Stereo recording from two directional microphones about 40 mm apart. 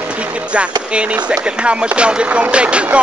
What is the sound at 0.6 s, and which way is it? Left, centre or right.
Speech, right.